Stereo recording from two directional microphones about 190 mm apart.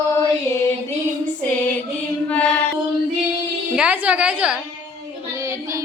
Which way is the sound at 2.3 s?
5° left (ahead or behind).